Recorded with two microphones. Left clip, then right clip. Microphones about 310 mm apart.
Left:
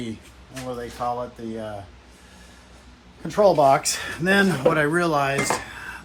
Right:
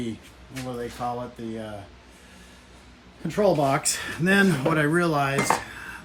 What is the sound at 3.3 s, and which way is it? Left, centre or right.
Speech, centre.